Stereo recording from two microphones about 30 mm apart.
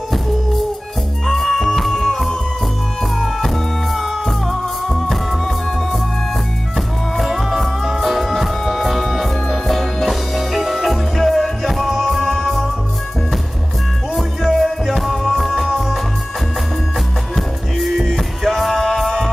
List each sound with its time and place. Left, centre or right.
1.2 s music: centre
7.2 s music: centre
14.1 s music: centre
17.4 s music: centre